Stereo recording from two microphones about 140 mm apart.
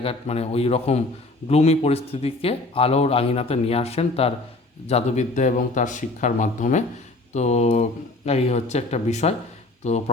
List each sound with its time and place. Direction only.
0.0 s a man's voice: 45° left (ahead or behind)